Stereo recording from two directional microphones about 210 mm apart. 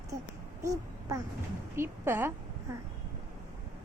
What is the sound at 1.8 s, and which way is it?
Speech, 10° right (ahead or behind).